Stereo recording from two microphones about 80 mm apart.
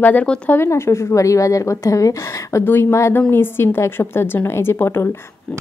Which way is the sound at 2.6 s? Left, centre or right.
Left.